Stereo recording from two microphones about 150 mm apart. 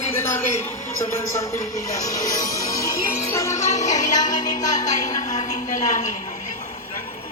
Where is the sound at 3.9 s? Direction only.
55° left (ahead or behind).